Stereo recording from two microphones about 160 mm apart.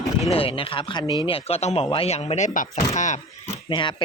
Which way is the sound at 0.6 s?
35° left (ahead or behind).